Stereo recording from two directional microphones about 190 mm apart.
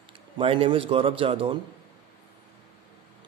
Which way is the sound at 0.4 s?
30° right (ahead or behind).